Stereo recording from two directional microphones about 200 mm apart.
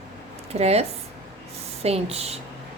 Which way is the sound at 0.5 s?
30° right (ahead or behind).